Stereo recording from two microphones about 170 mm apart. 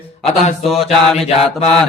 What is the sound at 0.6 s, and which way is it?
Speech, centre (ahead or behind).